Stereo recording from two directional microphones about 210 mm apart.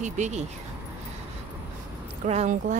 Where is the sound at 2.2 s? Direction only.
30° right (ahead or behind).